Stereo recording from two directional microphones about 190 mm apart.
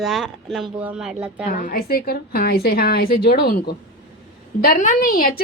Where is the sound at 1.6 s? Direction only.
50° left (ahead or behind).